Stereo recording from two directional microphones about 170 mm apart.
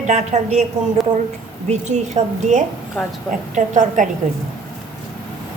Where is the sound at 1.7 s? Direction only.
45° right (ahead or behind).